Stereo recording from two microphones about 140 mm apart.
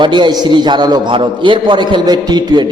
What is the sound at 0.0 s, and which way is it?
A man's voice, 35° right (ahead or behind).